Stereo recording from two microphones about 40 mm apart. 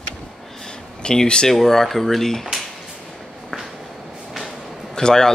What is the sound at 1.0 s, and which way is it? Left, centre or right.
Speech, left.